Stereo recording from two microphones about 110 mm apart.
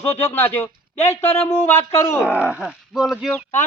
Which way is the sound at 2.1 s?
10° right (ahead or behind).